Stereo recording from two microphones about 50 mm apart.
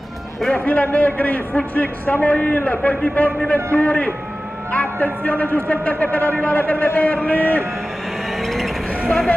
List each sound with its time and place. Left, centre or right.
0.7 s a man's voice: left
8.4 s vehicle: centre